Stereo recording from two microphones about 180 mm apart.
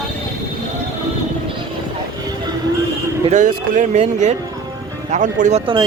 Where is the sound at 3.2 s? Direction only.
45° right (ahead or behind).